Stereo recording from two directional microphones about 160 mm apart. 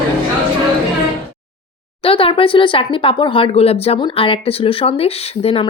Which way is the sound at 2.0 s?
35° left (ahead or behind).